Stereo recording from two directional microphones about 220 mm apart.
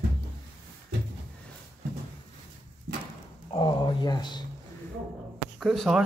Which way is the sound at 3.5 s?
20° left (ahead or behind).